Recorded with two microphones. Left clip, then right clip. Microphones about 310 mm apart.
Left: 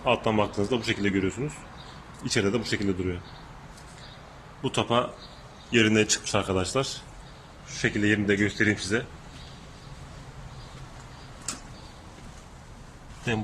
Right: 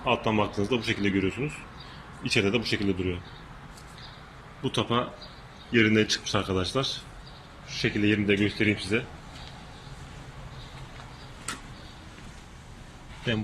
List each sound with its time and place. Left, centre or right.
0.0 s speech: centre
4.6 s speech: centre
7.9 s speech: centre